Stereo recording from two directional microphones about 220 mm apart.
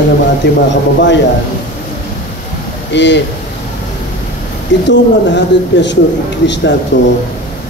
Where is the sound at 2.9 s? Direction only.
50° left (ahead or behind).